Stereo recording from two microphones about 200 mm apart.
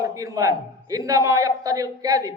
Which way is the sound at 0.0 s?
15° right (ahead or behind).